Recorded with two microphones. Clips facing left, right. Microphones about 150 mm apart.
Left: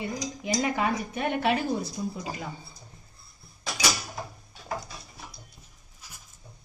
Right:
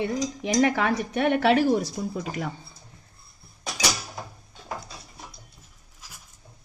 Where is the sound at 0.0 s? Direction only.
85° right.